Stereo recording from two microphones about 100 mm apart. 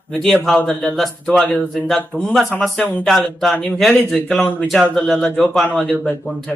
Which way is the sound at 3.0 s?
Centre (ahead or behind).